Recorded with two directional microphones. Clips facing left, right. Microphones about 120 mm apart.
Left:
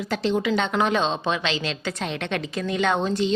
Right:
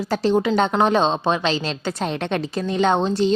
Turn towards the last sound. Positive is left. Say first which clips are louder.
# right 4 dB
turn(degrees=-30)  # may be behind; listen again after turning